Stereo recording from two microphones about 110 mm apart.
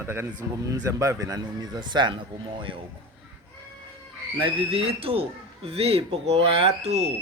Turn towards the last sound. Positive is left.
turn(degrees=-70)  # may be behind; listen again after turning